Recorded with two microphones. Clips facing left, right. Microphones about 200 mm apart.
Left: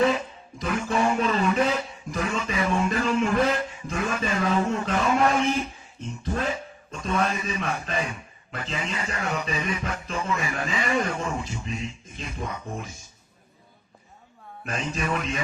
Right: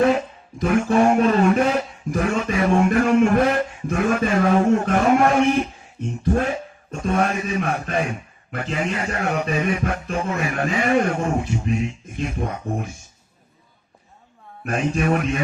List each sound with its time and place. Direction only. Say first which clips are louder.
0.6 s a man's voice: right 8 dB; 55° right (ahead or behind)
14.6 s a man's voice: right 8 dB; 55° right (ahead or behind)